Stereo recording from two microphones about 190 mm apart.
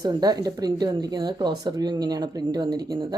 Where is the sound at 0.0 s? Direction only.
20° right (ahead or behind).